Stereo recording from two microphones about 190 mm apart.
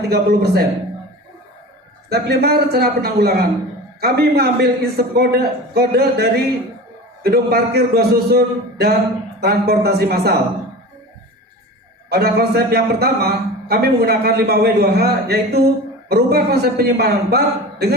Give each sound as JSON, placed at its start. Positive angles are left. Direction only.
{"t": 0.1, "sound": "a man's voice", "side_deg": -55}
{"t": 2.0, "sound": "a man's voice", "side_deg": -60}
{"t": 12.0, "sound": "a man's voice", "side_deg": -55}